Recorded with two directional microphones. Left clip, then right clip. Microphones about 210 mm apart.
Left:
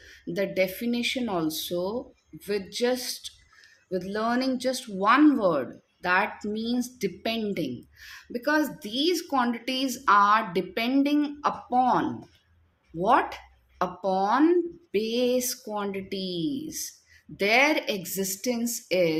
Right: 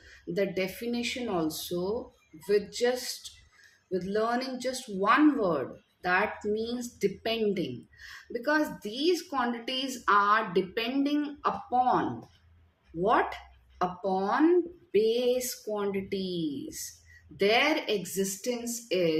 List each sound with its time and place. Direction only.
0.0 s speech: 50° left (ahead or behind)